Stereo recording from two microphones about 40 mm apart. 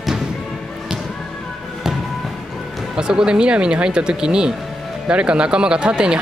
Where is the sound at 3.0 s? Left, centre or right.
Centre.